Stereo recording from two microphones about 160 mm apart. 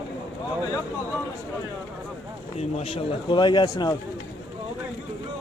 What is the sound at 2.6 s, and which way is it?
Speech, 40° left (ahead or behind).